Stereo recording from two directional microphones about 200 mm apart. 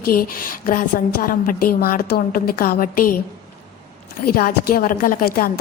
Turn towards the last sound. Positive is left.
turn(degrees=45)  # may be behind; listen again after turning